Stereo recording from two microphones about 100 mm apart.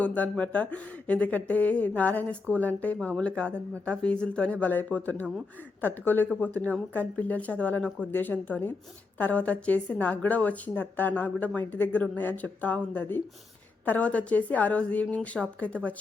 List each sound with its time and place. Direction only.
0.0 s speech: 15° left (ahead or behind)